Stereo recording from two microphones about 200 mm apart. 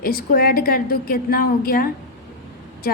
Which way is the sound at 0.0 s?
45° left (ahead or behind).